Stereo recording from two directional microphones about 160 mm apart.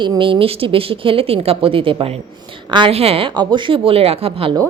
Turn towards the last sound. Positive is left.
turn(degrees=-35)  # may be behind; listen again after turning